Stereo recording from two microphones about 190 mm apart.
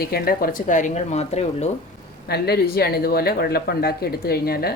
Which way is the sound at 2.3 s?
55° left (ahead or behind).